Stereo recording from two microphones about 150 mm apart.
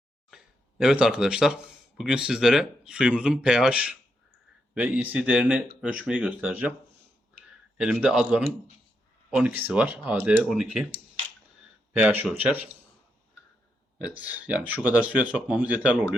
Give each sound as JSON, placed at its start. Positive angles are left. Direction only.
{"t": 0.3, "sound": "a sound", "side_deg": -5}
{"t": 2.0, "sound": "speech", "side_deg": -5}
{"t": 7.8, "sound": "speech", "side_deg": -5}
{"t": 11.9, "sound": "speech", "side_deg": -10}
{"t": 14.2, "sound": "speech", "side_deg": -10}